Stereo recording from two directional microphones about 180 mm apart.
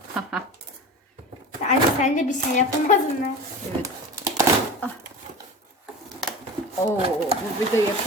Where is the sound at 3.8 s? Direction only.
20° right (ahead or behind).